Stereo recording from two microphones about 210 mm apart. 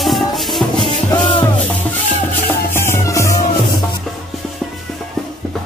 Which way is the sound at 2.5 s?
10° left (ahead or behind).